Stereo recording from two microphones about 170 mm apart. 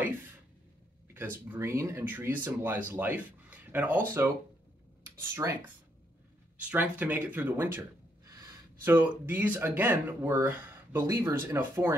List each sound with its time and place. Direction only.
1.4 s speech: 10° right (ahead or behind)
5.3 s speech: 15° right (ahead or behind)
6.7 s speech: 10° right (ahead or behind)